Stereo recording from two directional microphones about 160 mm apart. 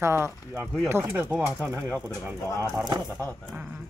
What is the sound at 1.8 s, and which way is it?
Speech, 10° left (ahead or behind).